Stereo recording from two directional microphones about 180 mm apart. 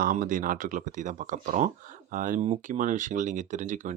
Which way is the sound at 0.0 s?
50° right (ahead or behind).